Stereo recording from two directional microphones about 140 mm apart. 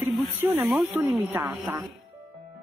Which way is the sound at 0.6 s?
15° right (ahead or behind).